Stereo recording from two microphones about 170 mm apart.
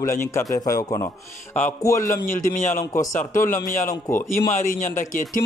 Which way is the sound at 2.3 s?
50° left (ahead or behind).